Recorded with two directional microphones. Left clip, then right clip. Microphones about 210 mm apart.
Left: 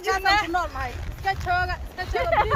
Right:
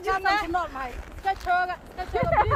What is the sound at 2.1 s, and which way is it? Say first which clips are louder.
Speech: left 1 dB; 10° right (ahead or behind).